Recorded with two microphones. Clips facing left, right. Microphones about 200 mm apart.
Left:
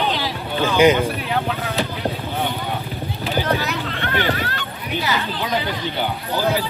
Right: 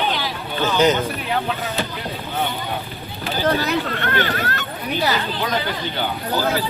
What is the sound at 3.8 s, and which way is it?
Speech, 45° right (ahead or behind).